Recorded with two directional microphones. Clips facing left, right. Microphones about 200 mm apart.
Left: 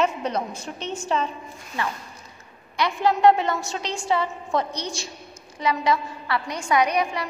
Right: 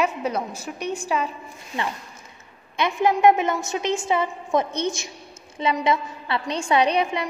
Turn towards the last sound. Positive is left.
turn(degrees=-25)  # may be behind; listen again after turning